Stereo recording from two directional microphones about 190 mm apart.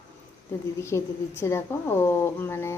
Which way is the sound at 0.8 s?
15° left (ahead or behind).